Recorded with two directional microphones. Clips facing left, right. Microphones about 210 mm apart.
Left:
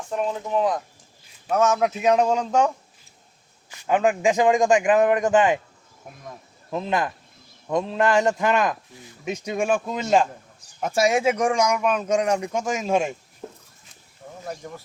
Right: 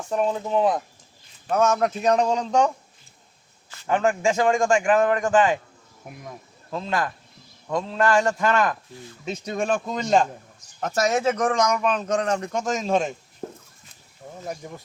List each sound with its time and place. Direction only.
0.3 s speech: 25° right (ahead or behind)
1.5 s speech: 5° left (ahead or behind); by 5.5 s 20° left (ahead or behind)
6.7 s a man's voice: 20° left (ahead or behind)